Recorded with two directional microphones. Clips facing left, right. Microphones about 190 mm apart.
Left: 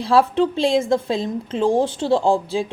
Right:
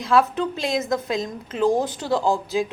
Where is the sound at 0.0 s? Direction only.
30° left (ahead or behind).